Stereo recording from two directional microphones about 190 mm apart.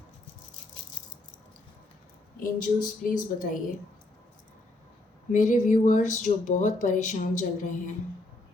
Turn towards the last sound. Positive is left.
turn(degrees=40)  # may be behind; listen again after turning